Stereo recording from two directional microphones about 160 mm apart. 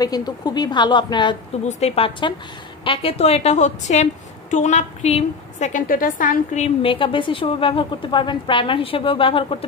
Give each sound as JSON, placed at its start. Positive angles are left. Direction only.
{"t": 0.0, "sound": "a woman's voice", "side_deg": 25}
{"t": 1.7, "sound": "a woman's voice", "side_deg": 40}